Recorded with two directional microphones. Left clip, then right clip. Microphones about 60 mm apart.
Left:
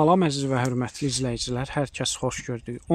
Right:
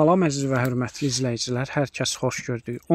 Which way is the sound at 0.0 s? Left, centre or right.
Right.